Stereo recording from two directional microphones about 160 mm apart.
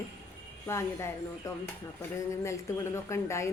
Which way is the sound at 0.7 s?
15° left (ahead or behind).